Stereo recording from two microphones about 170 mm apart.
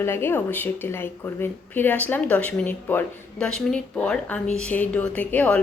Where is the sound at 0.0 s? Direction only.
15° left (ahead or behind).